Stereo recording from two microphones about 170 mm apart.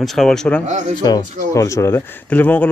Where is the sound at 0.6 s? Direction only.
45° right (ahead or behind).